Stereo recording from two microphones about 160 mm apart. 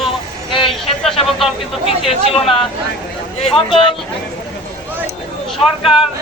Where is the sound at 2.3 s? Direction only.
35° left (ahead or behind).